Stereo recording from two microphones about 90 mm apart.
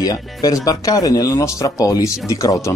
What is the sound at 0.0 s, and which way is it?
Speech, 45° left (ahead or behind).